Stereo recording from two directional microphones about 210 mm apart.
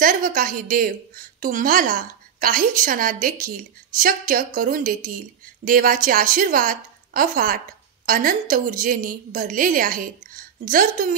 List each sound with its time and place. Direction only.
0.0 s a woman's voice: 40° right (ahead or behind)